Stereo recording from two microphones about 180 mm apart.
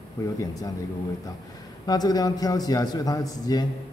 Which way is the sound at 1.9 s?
20° left (ahead or behind).